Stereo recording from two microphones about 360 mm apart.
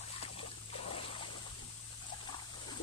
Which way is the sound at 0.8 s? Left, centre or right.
Centre.